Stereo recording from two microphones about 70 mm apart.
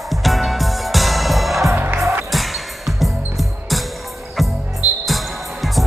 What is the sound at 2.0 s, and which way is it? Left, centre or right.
Music, right.